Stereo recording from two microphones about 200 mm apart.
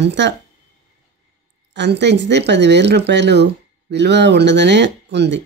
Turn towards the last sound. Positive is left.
turn(degrees=-60)  # may be behind; listen again after turning